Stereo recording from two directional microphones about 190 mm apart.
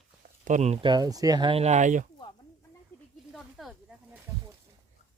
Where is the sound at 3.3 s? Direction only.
Centre (ahead or behind).